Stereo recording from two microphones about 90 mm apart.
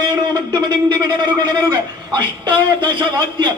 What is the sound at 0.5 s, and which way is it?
A man's voice, 55° right (ahead or behind).